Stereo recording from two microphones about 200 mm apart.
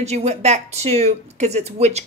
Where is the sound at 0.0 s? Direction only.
35° right (ahead or behind).